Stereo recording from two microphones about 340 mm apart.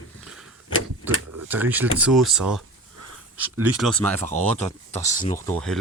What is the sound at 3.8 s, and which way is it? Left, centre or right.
Speech, centre.